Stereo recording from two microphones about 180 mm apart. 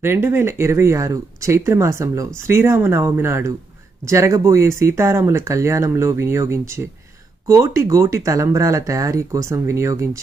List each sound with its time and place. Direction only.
0.0 s speech: 15° right (ahead or behind)